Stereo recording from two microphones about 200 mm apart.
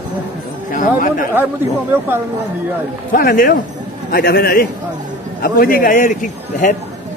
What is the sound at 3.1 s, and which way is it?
A man's voice, 45° left (ahead or behind).